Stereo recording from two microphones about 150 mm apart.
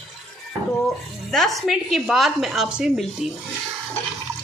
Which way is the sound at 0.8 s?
Centre (ahead or behind).